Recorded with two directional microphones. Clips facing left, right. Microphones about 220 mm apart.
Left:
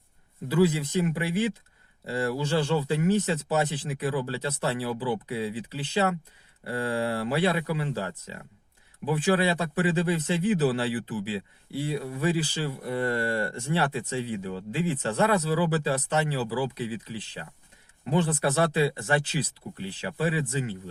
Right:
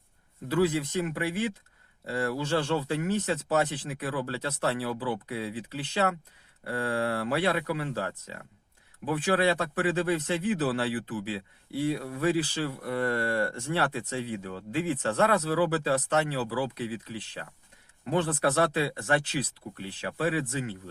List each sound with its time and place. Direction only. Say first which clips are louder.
0.4 s speech: left 2 dB; 5° left (ahead or behind)
12.9 s speech: left 2 dB; 20° left (ahead or behind)
13.7 s speech: left 2 dB; centre (ahead or behind)
18.0 s speech: left 1 dB; centre (ahead or behind)